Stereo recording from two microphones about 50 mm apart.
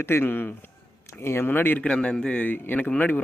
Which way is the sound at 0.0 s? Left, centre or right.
Left.